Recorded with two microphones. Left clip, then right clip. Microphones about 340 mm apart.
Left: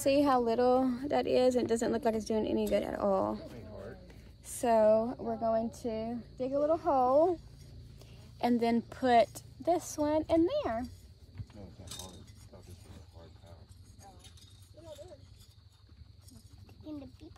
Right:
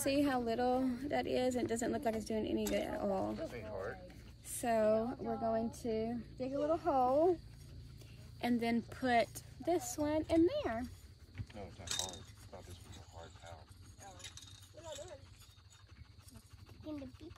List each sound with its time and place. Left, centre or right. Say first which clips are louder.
0.0 s speech: left 8 dB; centre
4.5 s speech: left 7 dB; centre
8.4 s speech: left 7 dB; centre